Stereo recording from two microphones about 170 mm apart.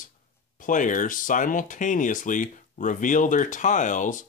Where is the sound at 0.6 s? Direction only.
50° left (ahead or behind).